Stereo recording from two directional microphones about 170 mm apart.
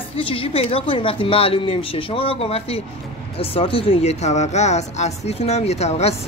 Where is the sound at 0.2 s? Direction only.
35° left (ahead or behind).